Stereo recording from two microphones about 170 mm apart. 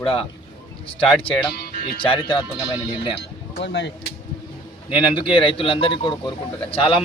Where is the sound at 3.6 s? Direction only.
90° left.